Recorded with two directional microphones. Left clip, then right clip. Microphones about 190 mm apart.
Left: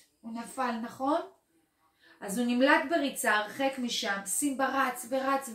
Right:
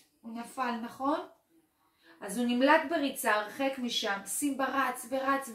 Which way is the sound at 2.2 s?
20° left (ahead or behind).